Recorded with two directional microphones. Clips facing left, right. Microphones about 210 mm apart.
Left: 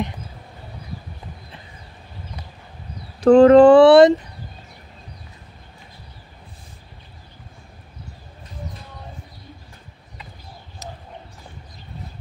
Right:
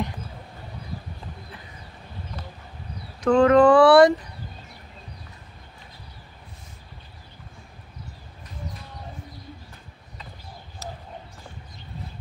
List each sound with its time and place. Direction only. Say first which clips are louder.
3.2 s speech: left 7 dB; 30° left (ahead or behind)